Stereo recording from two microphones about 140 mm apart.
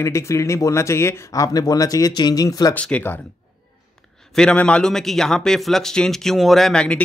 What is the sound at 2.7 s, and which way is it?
A man's voice, 10° left (ahead or behind).